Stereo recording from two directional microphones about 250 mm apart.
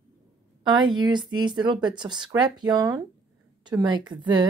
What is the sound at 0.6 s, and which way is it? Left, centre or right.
A woman's voice, centre.